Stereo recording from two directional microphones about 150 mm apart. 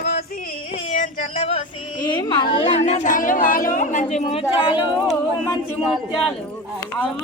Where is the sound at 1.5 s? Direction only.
50° left (ahead or behind).